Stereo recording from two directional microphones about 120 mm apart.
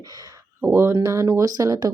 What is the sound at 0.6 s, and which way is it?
A woman's voice, 20° right (ahead or behind).